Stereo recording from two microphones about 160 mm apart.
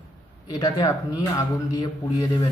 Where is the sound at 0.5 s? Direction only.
25° left (ahead or behind).